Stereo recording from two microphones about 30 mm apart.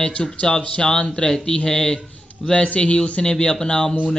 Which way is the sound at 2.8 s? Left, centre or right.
Left.